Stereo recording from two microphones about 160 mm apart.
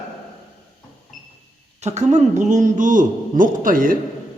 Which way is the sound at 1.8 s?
45° right (ahead or behind).